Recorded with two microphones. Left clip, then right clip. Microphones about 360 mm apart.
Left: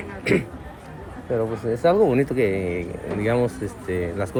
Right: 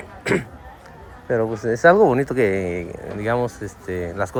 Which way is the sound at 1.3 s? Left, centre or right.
Right.